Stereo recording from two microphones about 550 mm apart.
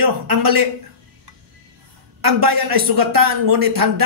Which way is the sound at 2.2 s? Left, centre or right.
Right.